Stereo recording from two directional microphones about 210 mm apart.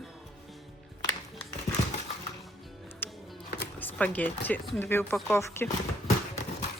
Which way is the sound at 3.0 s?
10° left (ahead or behind).